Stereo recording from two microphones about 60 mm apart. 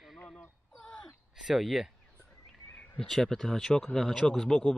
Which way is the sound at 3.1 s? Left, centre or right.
Centre.